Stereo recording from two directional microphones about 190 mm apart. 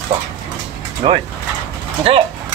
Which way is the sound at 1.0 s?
30° right (ahead or behind).